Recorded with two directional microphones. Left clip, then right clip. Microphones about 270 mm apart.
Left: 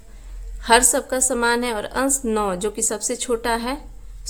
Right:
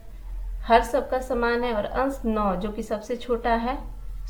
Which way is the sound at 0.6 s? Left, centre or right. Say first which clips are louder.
Left 3 dB; left.